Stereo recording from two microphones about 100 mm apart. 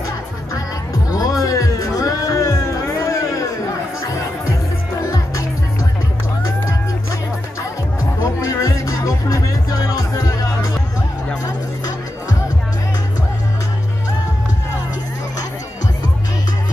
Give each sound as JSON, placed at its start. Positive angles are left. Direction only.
{"t": 1.1, "sound": "music", "side_deg": 35}
{"t": 8.0, "sound": "music", "side_deg": 30}